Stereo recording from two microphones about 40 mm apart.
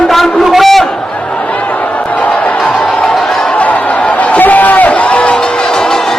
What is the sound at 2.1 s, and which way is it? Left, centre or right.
Music, left.